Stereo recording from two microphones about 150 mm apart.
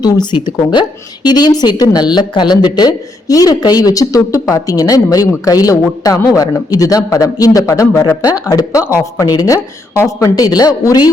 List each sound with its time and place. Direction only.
0.0 s a woman's voice: 25° left (ahead or behind)
8.2 s a woman's voice: 25° left (ahead or behind)